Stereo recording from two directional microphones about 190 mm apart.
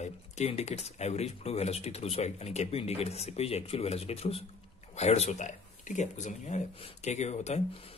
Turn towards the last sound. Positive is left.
turn(degrees=35)  # may be behind; listen again after turning